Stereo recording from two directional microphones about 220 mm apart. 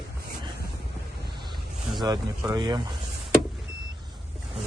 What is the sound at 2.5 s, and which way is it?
Speech, 20° right (ahead or behind).